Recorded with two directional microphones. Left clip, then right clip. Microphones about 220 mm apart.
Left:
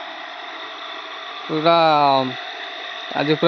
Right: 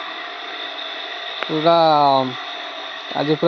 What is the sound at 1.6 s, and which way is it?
Speech, centre (ahead or behind).